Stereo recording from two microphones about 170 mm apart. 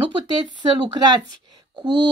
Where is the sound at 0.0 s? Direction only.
25° right (ahead or behind).